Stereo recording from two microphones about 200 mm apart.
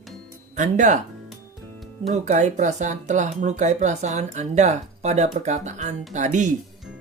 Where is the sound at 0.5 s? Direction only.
40° right (ahead or behind).